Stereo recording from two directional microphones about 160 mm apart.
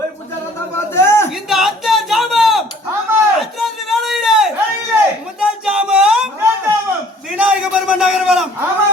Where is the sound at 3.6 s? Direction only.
Centre (ahead or behind).